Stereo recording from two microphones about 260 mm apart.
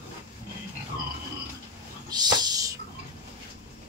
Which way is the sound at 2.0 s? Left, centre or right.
Centre.